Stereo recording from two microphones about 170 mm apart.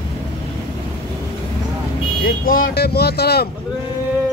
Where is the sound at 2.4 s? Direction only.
55° left (ahead or behind).